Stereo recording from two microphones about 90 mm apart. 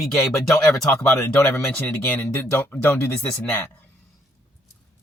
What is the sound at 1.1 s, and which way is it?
Speech, 25° left (ahead or behind).